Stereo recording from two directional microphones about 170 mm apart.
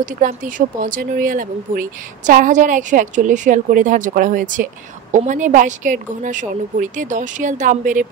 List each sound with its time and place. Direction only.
0.0 s speech: 50° right (ahead or behind)